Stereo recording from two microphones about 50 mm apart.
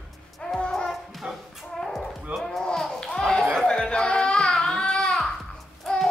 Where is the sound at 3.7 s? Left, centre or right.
Centre.